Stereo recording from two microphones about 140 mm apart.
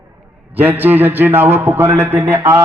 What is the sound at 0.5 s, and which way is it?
A man's voice, 15° right (ahead or behind).